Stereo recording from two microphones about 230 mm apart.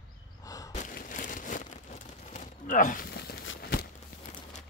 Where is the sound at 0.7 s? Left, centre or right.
Left.